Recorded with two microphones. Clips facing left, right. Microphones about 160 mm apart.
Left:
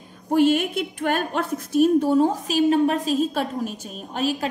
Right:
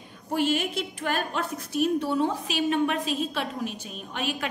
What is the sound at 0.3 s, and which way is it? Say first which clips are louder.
A woman's voice: left 7 dB; 50° left (ahead or behind).